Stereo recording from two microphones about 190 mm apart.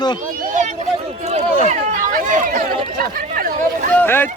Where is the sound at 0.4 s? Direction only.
40° right (ahead or behind).